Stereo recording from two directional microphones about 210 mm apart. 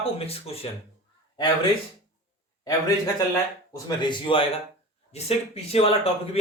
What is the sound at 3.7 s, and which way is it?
A man's voice, 20° left (ahead or behind).